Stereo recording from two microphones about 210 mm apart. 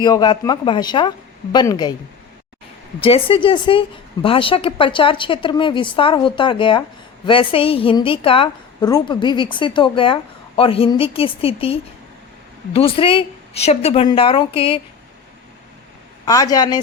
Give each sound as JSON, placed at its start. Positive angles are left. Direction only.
{"t": 0.0, "sound": "a woman's voice", "side_deg": 20}
{"t": 3.0, "sound": "a woman's voice", "side_deg": 25}
{"t": 16.2, "sound": "speech", "side_deg": 15}